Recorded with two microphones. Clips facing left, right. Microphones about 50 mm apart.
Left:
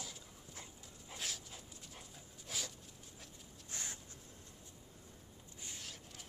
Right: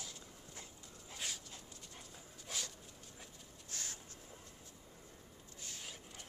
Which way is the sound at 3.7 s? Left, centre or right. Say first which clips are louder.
Left 1 dB; left.